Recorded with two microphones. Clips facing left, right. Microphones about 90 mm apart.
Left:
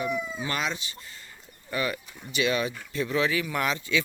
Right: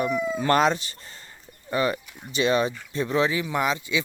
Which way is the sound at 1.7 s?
30° right (ahead or behind).